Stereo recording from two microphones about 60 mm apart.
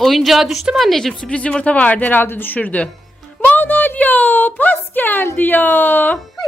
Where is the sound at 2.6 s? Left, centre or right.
Left.